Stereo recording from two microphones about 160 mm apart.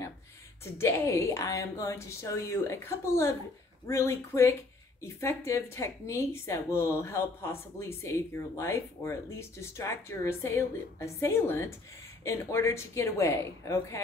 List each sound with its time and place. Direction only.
0.7 s speech: 15° left (ahead or behind)